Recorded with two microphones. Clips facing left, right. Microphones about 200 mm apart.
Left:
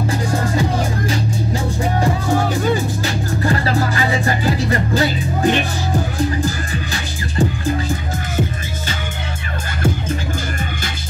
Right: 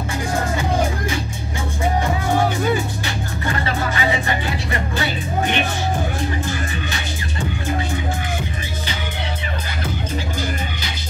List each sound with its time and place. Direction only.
0.6 s music: 35° left (ahead or behind)
3.4 s music: 35° left (ahead or behind)